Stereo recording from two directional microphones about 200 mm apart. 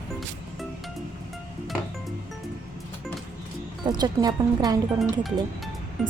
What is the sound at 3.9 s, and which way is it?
Speech, 20° right (ahead or behind).